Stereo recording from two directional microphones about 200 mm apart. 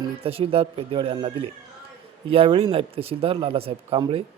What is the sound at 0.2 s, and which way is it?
Speech, 30° right (ahead or behind).